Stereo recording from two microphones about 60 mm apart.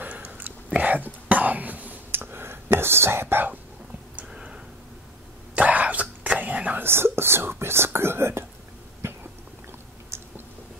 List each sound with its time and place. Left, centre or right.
0.0 s a sound: right
4.3 s tick-tock: centre
5.6 s whispering: right
6.8 s whispering: right
9.0 s a sound: right
10.1 s chewing: right